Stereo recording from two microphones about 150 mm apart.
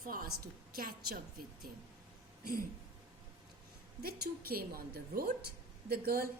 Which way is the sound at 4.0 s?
90° right.